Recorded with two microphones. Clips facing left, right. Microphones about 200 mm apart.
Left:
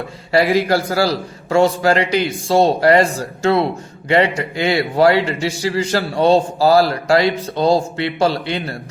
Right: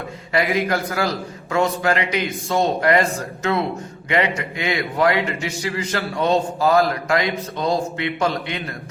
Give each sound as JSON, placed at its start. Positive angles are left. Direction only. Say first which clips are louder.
{"t": 0.3, "sound": "a man's voice", "louder": "left 6 dB", "side_deg": 30}